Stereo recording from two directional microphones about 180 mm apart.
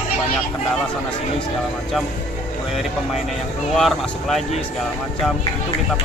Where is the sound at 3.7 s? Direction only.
Centre (ahead or behind).